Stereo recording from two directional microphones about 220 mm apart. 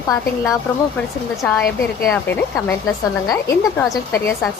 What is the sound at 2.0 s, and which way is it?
A woman's voice, 10° left (ahead or behind).